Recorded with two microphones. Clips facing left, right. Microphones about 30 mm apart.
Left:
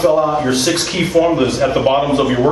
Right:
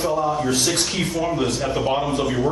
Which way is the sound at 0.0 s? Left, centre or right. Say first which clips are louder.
Left 8 dB; left.